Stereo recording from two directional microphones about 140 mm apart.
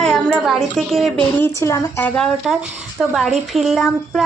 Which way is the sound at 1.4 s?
20° left (ahead or behind).